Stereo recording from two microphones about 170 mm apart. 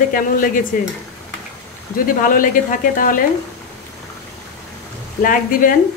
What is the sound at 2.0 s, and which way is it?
Speech, 55° left (ahead or behind).